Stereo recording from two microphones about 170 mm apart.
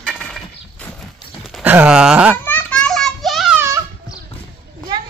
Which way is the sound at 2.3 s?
10° left (ahead or behind).